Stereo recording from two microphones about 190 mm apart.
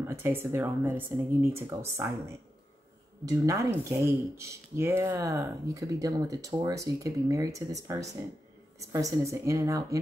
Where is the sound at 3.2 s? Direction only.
15° right (ahead or behind).